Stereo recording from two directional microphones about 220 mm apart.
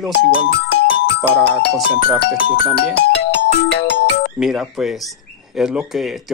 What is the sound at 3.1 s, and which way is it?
Ringtone, 50° left (ahead or behind).